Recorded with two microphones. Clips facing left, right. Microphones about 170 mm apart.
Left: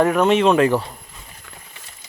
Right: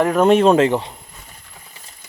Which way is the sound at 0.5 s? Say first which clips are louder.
Right 1 dB; 20° right (ahead or behind).